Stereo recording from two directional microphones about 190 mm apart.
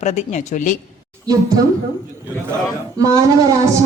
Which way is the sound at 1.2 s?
20° right (ahead or behind).